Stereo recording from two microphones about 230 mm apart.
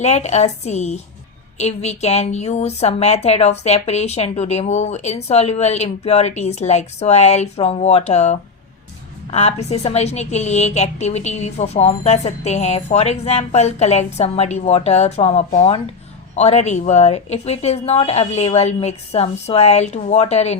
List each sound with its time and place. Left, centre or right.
0.0 s a woman's voice: left